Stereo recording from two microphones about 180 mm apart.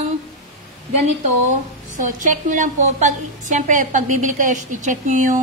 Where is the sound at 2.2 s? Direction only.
45° right (ahead or behind).